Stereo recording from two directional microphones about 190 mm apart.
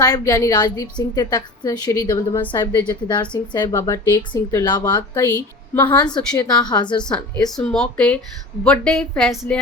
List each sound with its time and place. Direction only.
0.0 s a woman's voice: 20° left (ahead or behind)
6.1 s a woman's voice: 20° left (ahead or behind)
7.0 s a woman's voice: 5° left (ahead or behind)